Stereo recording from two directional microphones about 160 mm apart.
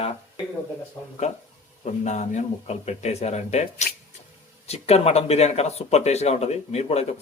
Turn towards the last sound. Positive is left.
turn(degrees=40)  # may be behind; listen again after turning